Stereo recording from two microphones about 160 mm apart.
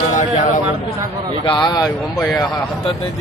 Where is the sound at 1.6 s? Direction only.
25° left (ahead or behind).